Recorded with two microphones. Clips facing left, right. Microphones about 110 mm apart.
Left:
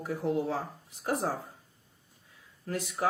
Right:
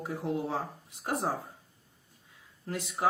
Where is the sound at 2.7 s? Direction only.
25° right (ahead or behind).